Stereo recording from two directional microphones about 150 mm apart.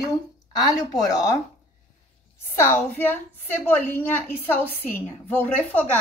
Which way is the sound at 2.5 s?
15° left (ahead or behind).